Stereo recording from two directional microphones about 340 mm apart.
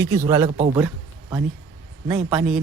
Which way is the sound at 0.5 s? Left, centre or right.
Centre.